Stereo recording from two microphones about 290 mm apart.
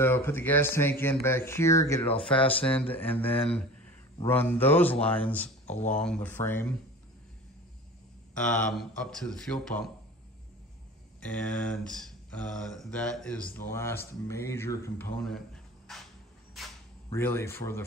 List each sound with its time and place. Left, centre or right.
0.0 s speech: centre
8.4 s speech: centre
11.2 s speech: centre
16.5 s a sound: centre